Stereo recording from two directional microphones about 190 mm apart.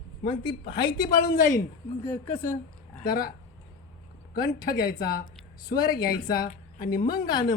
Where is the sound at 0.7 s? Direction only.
25° left (ahead or behind).